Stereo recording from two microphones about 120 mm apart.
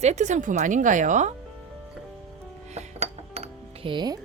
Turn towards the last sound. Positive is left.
turn(degrees=-40)  # may be behind; listen again after turning